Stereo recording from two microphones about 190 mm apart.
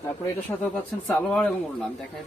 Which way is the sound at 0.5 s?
15° left (ahead or behind).